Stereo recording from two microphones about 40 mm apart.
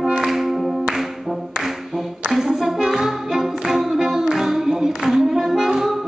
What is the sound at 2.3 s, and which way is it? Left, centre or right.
Music, centre.